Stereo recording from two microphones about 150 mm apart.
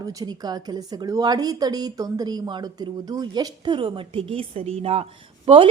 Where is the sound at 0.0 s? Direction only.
25° right (ahead or behind).